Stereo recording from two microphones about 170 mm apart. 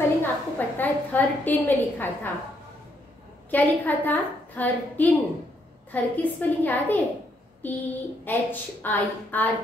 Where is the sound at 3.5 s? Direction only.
10° left (ahead or behind).